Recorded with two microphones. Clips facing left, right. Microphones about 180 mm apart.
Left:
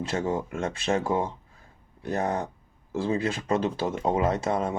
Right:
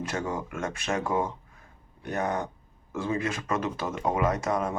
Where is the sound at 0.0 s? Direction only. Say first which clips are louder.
Left 4 dB; 25° left (ahead or behind).